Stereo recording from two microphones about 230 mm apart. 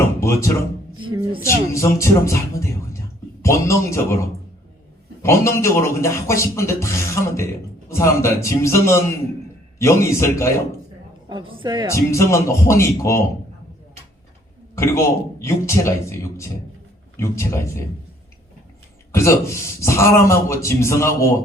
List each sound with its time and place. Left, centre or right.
0.2 s speech: centre
0.9 s speech: centre
1.4 s speech: centre
11.3 s a woman's voice: right
11.9 s speech: centre
14.8 s speech: centre
19.1 s speech: centre